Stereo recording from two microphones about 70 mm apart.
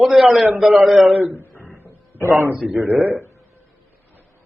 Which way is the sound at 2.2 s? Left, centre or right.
Right.